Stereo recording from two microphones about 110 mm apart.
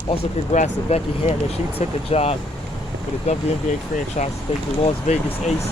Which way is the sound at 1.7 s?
65° left (ahead or behind).